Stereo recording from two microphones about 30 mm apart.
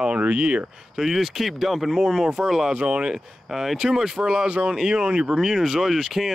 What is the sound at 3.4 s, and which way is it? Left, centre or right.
Speech, centre.